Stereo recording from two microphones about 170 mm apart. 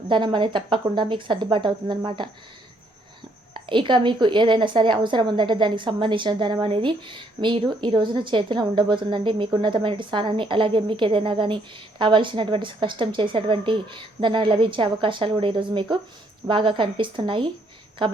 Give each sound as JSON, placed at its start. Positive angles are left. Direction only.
{"t": 0.1, "sound": "a woman's voice", "side_deg": -30}
{"t": 3.5, "sound": "a woman's voice", "side_deg": -30}